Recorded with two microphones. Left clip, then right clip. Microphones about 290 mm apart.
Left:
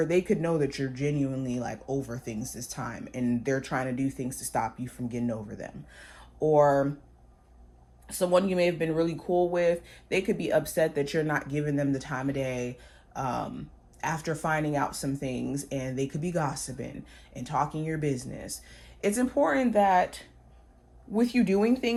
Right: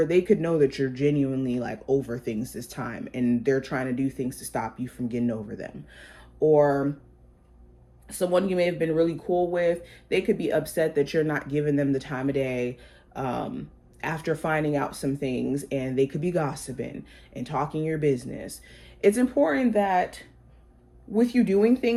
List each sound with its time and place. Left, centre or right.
0.0 s speech: left
0.9 s speech: centre
2.7 s speech: centre
8.0 s speech: left
12.0 s speech: centre
13.1 s speech: centre
16.6 s speech: left
18.1 s speech: centre
18.3 s speech: left